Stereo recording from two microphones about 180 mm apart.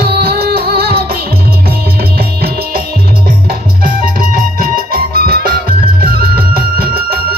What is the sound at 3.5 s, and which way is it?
Music, 55° right (ahead or behind).